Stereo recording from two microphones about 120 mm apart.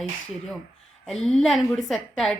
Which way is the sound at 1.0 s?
5° left (ahead or behind).